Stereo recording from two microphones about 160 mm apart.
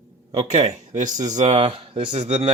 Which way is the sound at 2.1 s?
45° right (ahead or behind).